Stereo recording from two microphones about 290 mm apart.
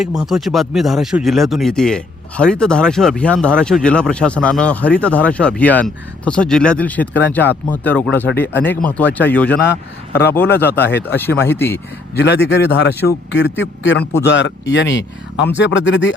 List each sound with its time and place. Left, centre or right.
0.2 s a man's voice: centre
12.1 s a man's voice: left